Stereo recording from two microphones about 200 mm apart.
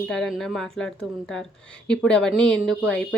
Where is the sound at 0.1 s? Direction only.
Centre (ahead or behind).